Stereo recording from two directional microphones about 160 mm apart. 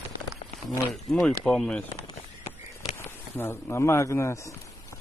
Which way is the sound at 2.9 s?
15° left (ahead or behind).